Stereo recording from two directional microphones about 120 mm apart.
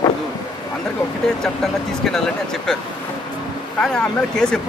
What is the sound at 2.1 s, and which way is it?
Speech, 5° left (ahead or behind).